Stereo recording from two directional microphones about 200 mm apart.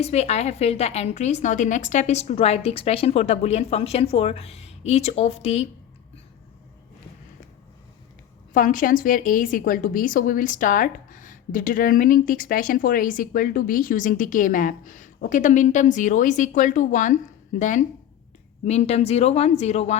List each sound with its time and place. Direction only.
0.0 s a woman's voice: 30° left (ahead or behind)
8.5 s a woman's voice: 40° left (ahead or behind)